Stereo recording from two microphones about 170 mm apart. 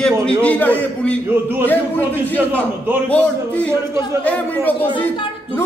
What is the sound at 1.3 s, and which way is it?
Speech, 15° right (ahead or behind).